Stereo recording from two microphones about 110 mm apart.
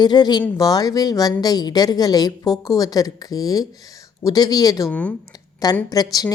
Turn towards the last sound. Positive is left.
turn(degrees=35)  # may be behind; listen again after turning